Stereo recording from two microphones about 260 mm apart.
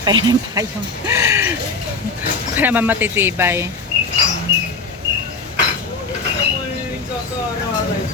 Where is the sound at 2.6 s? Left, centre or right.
Centre.